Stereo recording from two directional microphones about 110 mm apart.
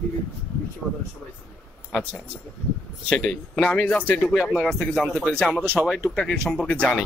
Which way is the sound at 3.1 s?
10° left (ahead or behind).